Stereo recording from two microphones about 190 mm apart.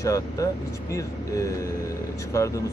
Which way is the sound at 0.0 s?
15° left (ahead or behind).